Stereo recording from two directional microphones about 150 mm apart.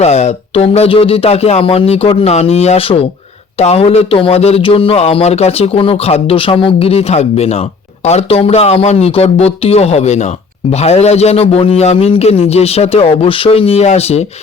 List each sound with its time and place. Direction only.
0.0 s speech: 45° left (ahead or behind)